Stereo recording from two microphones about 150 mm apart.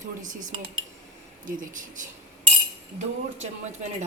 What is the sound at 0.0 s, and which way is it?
Speech, 60° right (ahead or behind).